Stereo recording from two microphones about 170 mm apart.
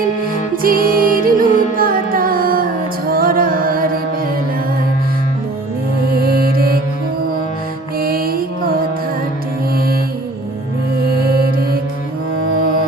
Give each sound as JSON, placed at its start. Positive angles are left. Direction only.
{"t": 0.5, "sound": "music", "side_deg": -55}
{"t": 6.1, "sound": "music", "side_deg": -60}
{"t": 7.9, "sound": "music", "side_deg": -60}
{"t": 9.7, "sound": "music", "side_deg": -60}